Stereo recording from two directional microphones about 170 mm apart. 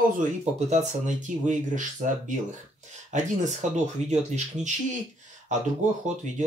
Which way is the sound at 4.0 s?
40° right (ahead or behind).